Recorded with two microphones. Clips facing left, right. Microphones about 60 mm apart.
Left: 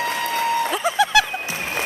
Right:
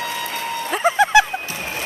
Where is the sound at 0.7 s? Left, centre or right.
Right.